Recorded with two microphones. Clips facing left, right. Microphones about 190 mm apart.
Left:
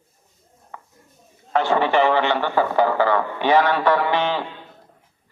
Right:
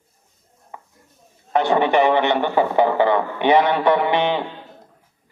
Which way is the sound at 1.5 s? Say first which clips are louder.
Right 2 dB; 20° right (ahead or behind).